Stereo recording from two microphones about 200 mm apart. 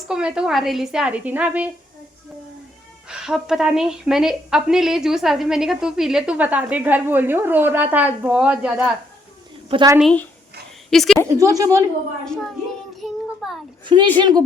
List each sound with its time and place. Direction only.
0.1 s a woman's voice: 5° right (ahead or behind)
3.1 s a woman's voice: 5° right (ahead or behind)
9.6 s a woman's voice: 25° right (ahead or behind)
10.0 s a woman's voice: 5° left (ahead or behind)
11.3 s speech: 15° right (ahead or behind)
12.2 s a woman's voice: 5° left (ahead or behind)
13.0 s child singing: centre (ahead or behind)
13.8 s a woman's voice: 25° right (ahead or behind)